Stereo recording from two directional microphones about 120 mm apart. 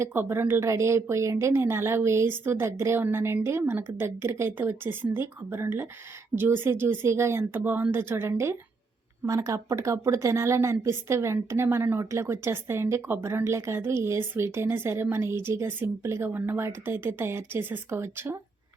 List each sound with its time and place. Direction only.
0.0 s a woman's voice: 20° right (ahead or behind)